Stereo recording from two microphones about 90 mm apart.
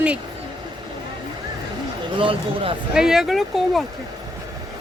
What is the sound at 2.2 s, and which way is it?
Speech, 80° right.